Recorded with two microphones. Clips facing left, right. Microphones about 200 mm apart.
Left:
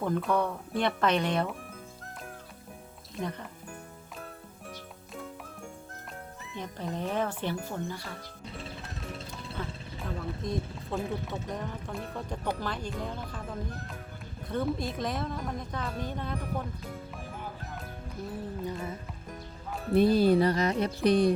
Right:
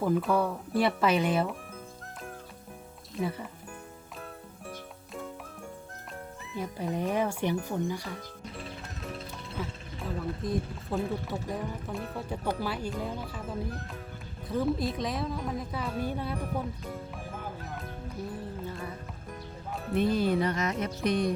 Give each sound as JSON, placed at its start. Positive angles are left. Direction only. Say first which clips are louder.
{"t": 0.0, "sound": "speech", "louder": "right 2 dB", "side_deg": -5}
{"t": 3.2, "sound": "speech", "louder": "right 3 dB", "side_deg": -5}
{"t": 5.9, "sound": "speech", "louder": "right 2 dB", "side_deg": 0}
{"t": 9.6, "sound": "speech", "louder": "right 2 dB", "side_deg": -5}
{"t": 18.6, "sound": "music", "louder": "left 3 dB", "side_deg": 15}
{"t": 19.9, "sound": "music", "louder": "left 4 dB", "side_deg": 35}